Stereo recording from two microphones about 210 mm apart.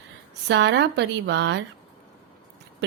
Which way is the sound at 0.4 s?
55° right (ahead or behind).